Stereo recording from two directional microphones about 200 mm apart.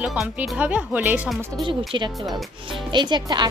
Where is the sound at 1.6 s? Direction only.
25° right (ahead or behind).